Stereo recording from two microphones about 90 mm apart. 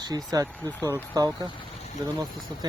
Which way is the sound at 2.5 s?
55° right (ahead or behind).